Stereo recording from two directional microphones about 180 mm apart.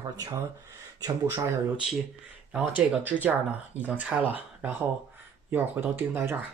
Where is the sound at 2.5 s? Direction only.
10° right (ahead or behind).